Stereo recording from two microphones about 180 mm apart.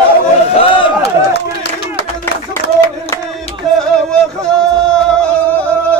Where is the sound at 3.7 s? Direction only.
5° left (ahead or behind).